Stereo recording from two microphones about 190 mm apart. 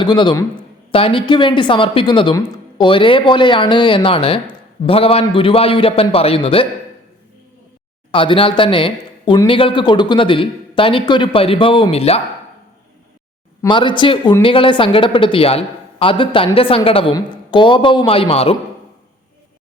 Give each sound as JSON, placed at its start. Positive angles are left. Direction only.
{"t": 0.0, "sound": "a man's voice", "side_deg": 25}
{"t": 8.1, "sound": "speech", "side_deg": 25}
{"t": 13.6, "sound": "speech", "side_deg": 25}